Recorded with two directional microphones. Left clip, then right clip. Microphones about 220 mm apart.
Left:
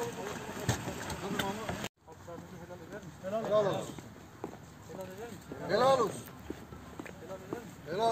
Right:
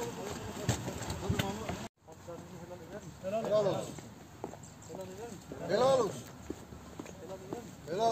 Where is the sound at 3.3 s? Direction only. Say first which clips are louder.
Left 1 dB; 15° right (ahead or behind).